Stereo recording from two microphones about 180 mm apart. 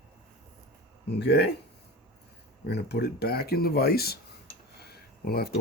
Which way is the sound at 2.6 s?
65° left (ahead or behind).